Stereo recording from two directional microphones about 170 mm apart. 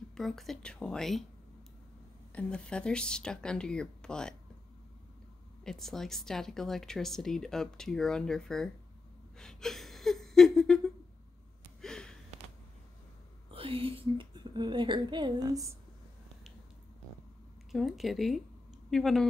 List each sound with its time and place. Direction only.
0.1 s speech: centre (ahead or behind)
2.3 s speech: 5° left (ahead or behind)
5.6 s speech: centre (ahead or behind)
9.4 s a sound: 5° left (ahead or behind)
13.5 s speech: 30° right (ahead or behind)
17.6 s speech: centre (ahead or behind)